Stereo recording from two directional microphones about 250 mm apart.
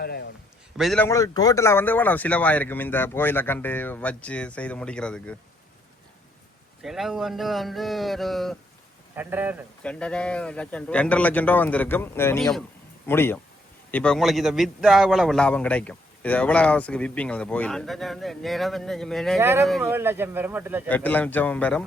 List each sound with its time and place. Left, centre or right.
0.0 s a sound: left
0.8 s speech: centre
6.8 s a man's voice: centre
9.8 s a man's voice: centre
19.4 s speech: centre
20.8 s speech: centre